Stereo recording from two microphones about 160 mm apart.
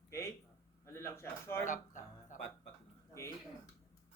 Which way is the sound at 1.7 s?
55° left (ahead or behind).